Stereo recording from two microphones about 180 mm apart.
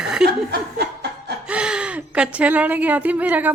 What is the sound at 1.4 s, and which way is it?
Speech, 5° right (ahead or behind).